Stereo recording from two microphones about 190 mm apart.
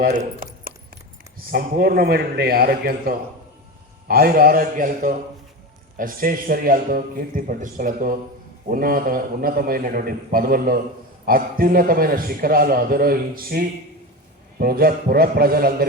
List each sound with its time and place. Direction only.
0.0 s a man's voice: 45° right (ahead or behind)
1.5 s a man's voice: 50° right (ahead or behind)